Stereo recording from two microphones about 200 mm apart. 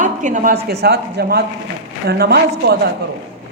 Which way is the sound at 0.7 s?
55° right (ahead or behind).